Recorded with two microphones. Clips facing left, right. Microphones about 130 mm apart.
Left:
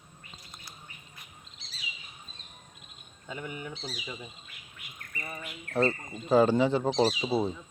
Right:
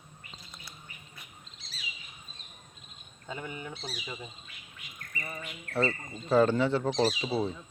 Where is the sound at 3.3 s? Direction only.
30° right (ahead or behind).